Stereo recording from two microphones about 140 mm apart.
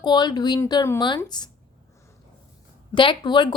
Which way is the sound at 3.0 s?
35° left (ahead or behind).